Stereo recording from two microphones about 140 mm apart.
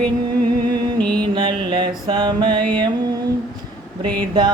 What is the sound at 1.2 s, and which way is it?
Mantra, 35° right (ahead or behind).